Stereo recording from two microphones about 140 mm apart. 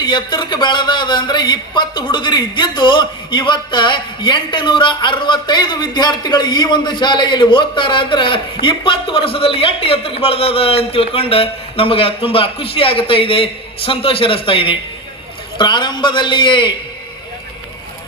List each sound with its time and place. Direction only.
0.0 s a man's voice: 30° left (ahead or behind)